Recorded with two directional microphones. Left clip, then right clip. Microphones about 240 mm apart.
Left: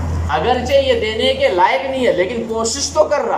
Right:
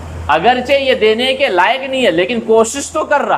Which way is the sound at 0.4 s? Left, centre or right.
Right.